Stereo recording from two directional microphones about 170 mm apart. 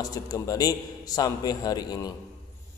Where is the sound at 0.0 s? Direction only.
20° left (ahead or behind).